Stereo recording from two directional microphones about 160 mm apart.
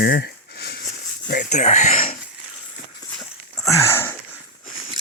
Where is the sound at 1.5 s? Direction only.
50° left (ahead or behind).